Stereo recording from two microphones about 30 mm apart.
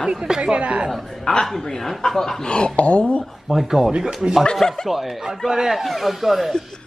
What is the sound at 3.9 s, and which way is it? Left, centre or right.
Speech, right.